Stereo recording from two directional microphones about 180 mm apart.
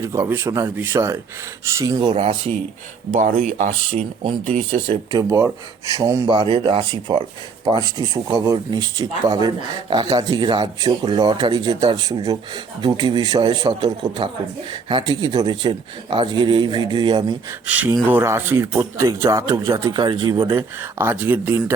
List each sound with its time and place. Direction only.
0.0 s speech: 15° right (ahead or behind)
2.0 s speech: 30° right (ahead or behind)
4.2 s speech: 25° right (ahead or behind)
5.1 s speech: 15° right (ahead or behind)
17.7 s speech: 10° right (ahead or behind)